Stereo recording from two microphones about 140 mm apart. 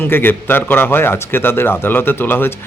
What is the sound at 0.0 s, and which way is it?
Speech, 15° left (ahead or behind).